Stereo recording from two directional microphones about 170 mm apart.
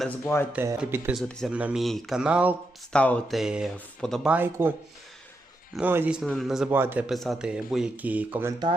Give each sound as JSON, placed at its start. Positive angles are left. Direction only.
{"t": 0.5, "sound": "speech", "side_deg": -15}
{"t": 1.1, "sound": "speech", "side_deg": 0}
{"t": 2.9, "sound": "speech", "side_deg": 5}
{"t": 5.7, "sound": "speech", "side_deg": -10}
{"t": 6.7, "sound": "speech", "side_deg": -15}
{"t": 7.1, "sound": "speech", "side_deg": 0}